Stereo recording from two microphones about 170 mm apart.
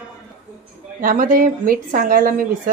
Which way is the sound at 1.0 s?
55° right (ahead or behind).